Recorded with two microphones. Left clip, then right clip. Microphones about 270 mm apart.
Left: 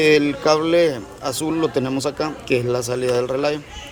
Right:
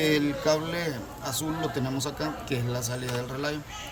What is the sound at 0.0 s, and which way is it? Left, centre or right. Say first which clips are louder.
Speech: left 10 dB; centre.